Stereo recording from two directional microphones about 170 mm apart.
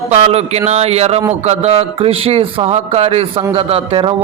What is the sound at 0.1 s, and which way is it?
A man's voice, 40° right (ahead or behind).